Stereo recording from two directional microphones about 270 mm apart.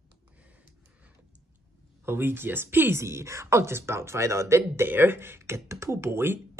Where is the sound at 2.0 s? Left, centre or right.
Centre.